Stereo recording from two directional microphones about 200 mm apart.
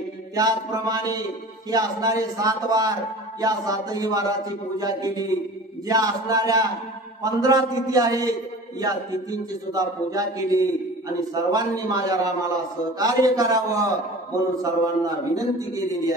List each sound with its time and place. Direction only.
0.4 s a man's voice: 20° right (ahead or behind)
9.5 s a man's voice: 20° right (ahead or behind)